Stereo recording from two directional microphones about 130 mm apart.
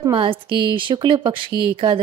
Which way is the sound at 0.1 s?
40° right (ahead or behind).